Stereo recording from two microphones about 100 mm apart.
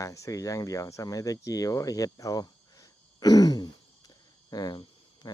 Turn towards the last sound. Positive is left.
turn(degrees=45)  # may be behind; listen again after turning